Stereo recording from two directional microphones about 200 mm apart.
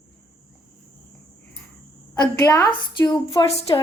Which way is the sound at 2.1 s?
15° left (ahead or behind).